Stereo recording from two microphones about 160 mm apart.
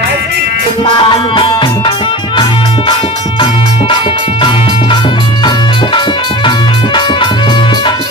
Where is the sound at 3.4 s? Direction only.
30° left (ahead or behind).